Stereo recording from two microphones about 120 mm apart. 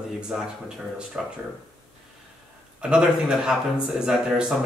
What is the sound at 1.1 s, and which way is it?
Speech, 10° right (ahead or behind).